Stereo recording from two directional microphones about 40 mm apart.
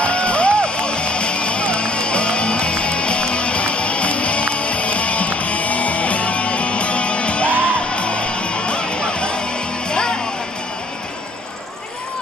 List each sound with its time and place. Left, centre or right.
0.0 s music: left